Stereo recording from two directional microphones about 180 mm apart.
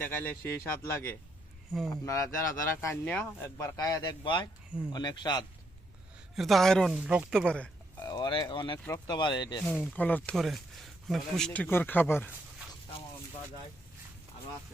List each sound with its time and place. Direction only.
0.0 s speech: 10° left (ahead or behind)
6.3 s speech: centre (ahead or behind)
7.4 s a sound: 5° left (ahead or behind)
8.0 s speech: 25° left (ahead or behind)
9.6 s speech: 5° left (ahead or behind)